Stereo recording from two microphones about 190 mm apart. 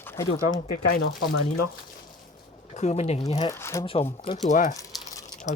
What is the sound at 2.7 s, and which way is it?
Speech, 35° left (ahead or behind).